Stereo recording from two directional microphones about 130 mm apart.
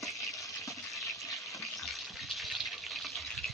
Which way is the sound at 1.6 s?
Centre (ahead or behind).